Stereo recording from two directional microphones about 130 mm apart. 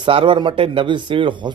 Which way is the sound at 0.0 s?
40° right (ahead or behind).